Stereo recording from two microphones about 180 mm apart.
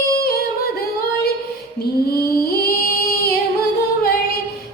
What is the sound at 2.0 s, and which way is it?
Music, 60° left (ahead or behind).